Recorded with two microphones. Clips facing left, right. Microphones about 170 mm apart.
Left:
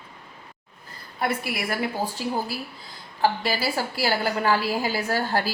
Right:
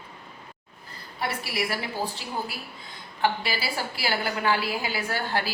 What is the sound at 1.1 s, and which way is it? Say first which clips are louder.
Speech: left 3 dB; 50° left (ahead or behind).